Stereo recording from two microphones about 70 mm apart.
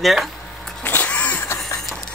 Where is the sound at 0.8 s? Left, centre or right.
Left.